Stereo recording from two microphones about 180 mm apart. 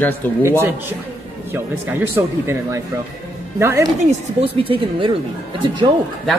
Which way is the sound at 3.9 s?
35° right (ahead or behind).